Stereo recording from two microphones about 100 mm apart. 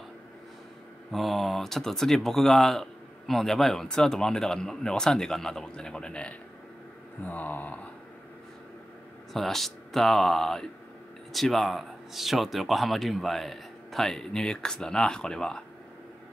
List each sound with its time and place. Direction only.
1.1 s speech: centre (ahead or behind)
9.3 s speech: centre (ahead or behind)